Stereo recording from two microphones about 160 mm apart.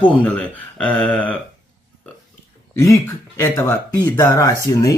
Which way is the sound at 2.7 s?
20° left (ahead or behind).